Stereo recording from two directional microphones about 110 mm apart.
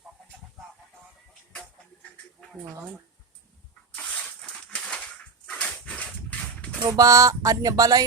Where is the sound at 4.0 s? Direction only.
5° left (ahead or behind).